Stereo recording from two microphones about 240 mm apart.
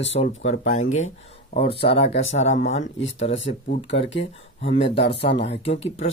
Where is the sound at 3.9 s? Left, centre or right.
Left.